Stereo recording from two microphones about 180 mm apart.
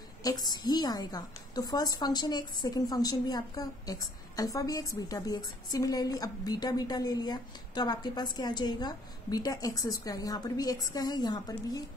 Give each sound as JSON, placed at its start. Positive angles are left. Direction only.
{"t": 0.2, "sound": "a woman's voice", "side_deg": 20}